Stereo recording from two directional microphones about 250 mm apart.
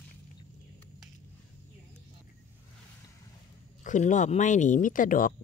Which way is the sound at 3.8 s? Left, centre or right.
Left.